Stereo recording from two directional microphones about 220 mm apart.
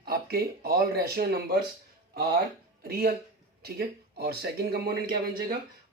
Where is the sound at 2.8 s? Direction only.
45° right (ahead or behind).